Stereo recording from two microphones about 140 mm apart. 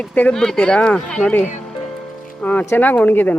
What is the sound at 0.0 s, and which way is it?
Speech, 10° left (ahead or behind).